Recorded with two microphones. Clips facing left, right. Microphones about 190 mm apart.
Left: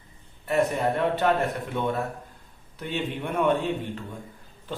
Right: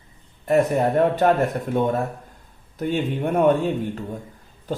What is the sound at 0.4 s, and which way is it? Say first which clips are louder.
A man's voice: right 5 dB; 45° right (ahead or behind).